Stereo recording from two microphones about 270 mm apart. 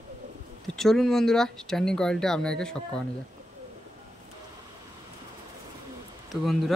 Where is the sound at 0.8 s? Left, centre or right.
Centre.